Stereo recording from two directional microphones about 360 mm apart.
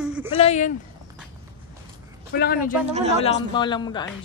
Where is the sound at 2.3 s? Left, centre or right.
Left.